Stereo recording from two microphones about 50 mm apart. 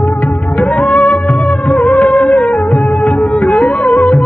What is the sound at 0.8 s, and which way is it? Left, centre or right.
Music, left.